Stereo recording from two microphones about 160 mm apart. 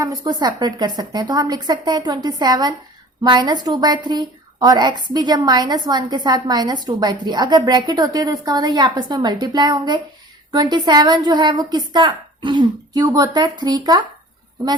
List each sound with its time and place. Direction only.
0.0 s a woman's voice: 20° right (ahead or behind)